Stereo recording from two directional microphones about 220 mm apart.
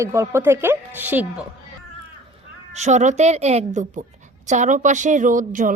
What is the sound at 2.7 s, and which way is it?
Speech, 30° right (ahead or behind).